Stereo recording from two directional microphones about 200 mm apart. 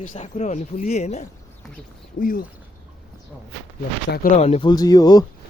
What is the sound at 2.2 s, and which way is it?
Speech, 45° left (ahead or behind).